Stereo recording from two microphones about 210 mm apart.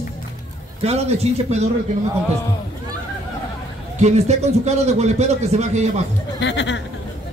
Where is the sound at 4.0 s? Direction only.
30° right (ahead or behind).